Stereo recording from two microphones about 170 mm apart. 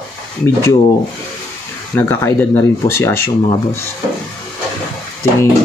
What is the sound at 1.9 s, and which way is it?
Speech, 15° left (ahead or behind).